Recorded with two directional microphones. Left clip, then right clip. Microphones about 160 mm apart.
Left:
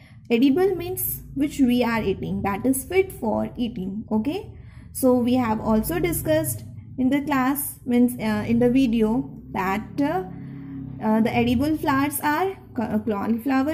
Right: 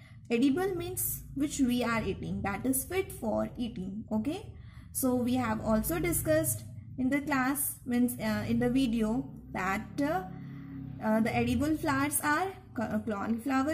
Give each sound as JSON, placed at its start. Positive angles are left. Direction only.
{"t": 0.3, "sound": "a woman's voice", "side_deg": 15}
{"t": 6.3, "sound": "a woman's voice", "side_deg": -45}
{"t": 7.0, "sound": "a woman's voice", "side_deg": 15}